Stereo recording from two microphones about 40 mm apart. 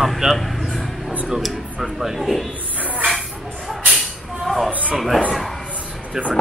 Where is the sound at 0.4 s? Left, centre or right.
Centre.